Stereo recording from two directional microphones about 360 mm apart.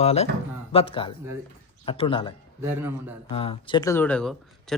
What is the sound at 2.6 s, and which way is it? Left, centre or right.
Speech, centre.